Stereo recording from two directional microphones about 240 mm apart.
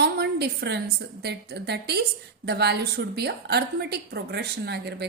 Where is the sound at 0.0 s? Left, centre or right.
Right.